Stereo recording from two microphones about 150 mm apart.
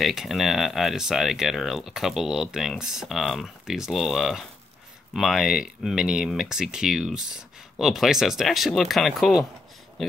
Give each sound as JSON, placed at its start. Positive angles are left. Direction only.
{"t": 0.0, "sound": "speech", "side_deg": 0}